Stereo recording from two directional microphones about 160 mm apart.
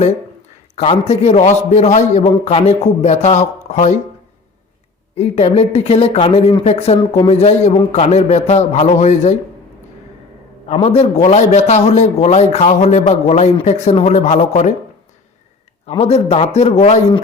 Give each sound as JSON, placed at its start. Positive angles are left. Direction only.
{"t": 0.8, "sound": "a man's voice", "side_deg": 40}
{"t": 5.1, "sound": "a man's voice", "side_deg": 40}
{"t": 10.8, "sound": "a man's voice", "side_deg": 40}
{"t": 15.9, "sound": "speech", "side_deg": 40}